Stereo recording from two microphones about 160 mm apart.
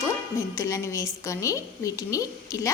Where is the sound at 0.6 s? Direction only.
20° left (ahead or behind).